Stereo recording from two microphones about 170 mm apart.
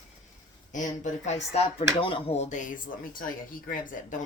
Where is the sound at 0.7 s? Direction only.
45° left (ahead or behind).